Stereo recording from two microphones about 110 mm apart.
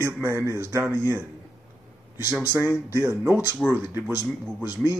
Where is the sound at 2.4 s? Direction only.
20° right (ahead or behind).